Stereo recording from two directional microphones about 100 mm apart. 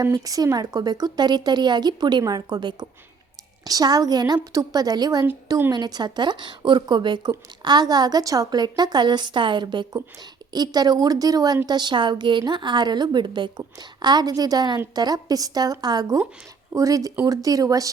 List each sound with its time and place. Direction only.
0.0 s a woman's voice: 35° right (ahead or behind)